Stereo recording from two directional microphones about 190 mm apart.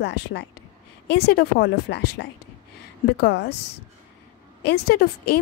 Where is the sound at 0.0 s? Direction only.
65° left (ahead or behind).